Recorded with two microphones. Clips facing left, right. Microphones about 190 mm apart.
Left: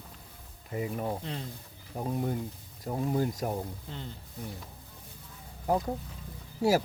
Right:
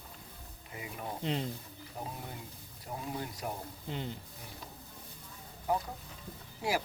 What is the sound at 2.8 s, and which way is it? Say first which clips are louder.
Speech: left 10 dB; 45° left (ahead or behind).